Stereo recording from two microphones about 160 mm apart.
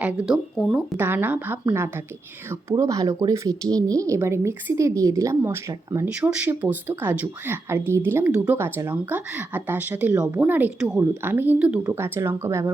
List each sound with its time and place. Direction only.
0.0 s speech: 10° right (ahead or behind)